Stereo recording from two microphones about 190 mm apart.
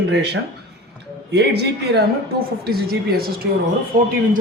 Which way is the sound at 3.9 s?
45° right (ahead or behind).